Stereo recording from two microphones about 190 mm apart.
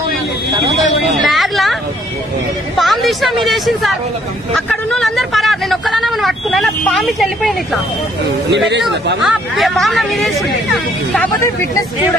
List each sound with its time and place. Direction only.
1.2 s speech: centre (ahead or behind)
2.8 s a woman's voice: centre (ahead or behind)
8.6 s speech: 65° right (ahead or behind)
9.2 s speech: centre (ahead or behind)
11.1 s speech: 15° left (ahead or behind)